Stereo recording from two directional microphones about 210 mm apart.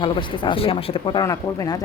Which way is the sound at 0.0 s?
25° left (ahead or behind).